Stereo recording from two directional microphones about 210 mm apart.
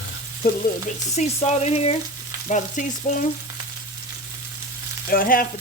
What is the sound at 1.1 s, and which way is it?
Frying, 30° left (ahead or behind).